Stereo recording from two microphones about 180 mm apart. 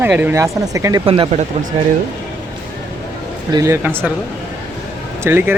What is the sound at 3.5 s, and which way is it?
Speech, 15° right (ahead or behind).